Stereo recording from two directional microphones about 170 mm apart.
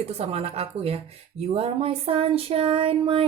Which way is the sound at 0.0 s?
35° right (ahead or behind).